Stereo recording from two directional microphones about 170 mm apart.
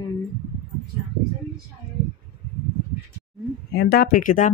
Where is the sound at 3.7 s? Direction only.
65° left (ahead or behind).